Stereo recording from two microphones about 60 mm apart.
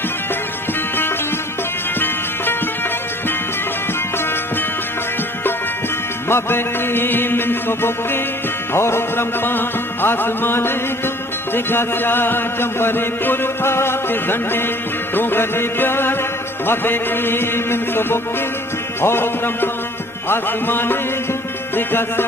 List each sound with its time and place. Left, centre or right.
2.0 s music: left
6.2 s chant: left